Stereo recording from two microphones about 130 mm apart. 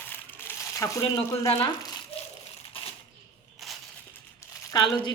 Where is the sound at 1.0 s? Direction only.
45° left (ahead or behind).